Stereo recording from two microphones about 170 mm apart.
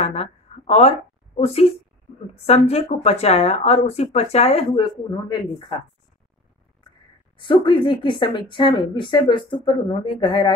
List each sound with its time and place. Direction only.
0.0 s speech: 40° left (ahead or behind)
7.3 s a woman's voice: 30° left (ahead or behind)